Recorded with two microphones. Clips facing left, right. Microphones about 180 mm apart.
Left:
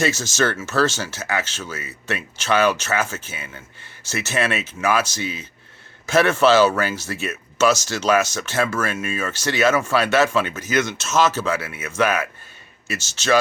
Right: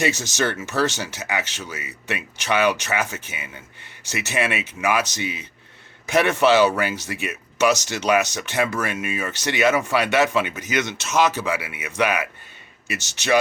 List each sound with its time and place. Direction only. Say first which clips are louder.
0.0 s speech: left 2 dB; 15° right (ahead or behind)